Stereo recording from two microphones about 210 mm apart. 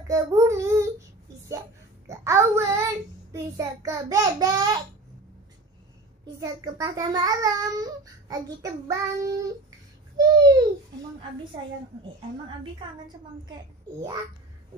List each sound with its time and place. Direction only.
0.1 s child singing: 15° right (ahead or behind)
2.0 s child singing: 15° right (ahead or behind)
6.2 s a child's voice: 20° right (ahead or behind)
10.1 s a sound: 20° right (ahead or behind)